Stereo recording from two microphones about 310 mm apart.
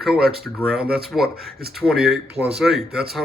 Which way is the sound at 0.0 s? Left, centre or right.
Centre.